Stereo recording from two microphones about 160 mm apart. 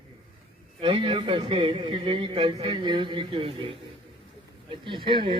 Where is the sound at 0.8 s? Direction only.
35° right (ahead or behind).